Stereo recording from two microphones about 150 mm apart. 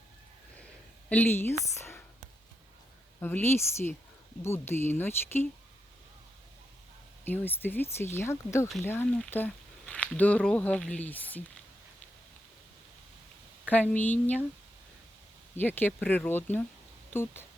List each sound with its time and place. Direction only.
1.1 s speech: 10° left (ahead or behind)
1.7 s whispering: 15° left (ahead or behind)
3.2 s speech: 15° left (ahead or behind)
7.3 s speech: 15° left (ahead or behind)
13.7 s speech: 10° left (ahead or behind)
15.5 s speech: 10° left (ahead or behind)